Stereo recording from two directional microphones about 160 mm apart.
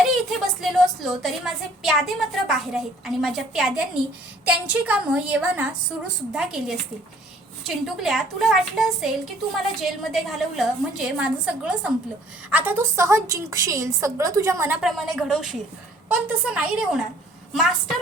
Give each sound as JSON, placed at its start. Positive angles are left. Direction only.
{"t": 0.3, "sound": "a woman's voice", "side_deg": 0}
{"t": 14.8, "sound": "a woman's voice", "side_deg": 0}